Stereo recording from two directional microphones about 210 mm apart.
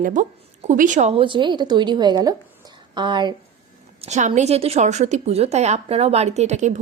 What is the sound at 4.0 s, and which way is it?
A woman's voice, 35° right (ahead or behind).